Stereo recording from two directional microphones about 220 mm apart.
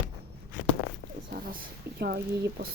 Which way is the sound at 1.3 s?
45° right (ahead or behind).